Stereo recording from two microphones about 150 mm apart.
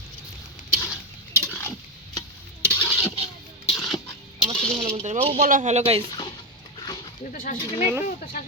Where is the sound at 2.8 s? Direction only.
15° left (ahead or behind).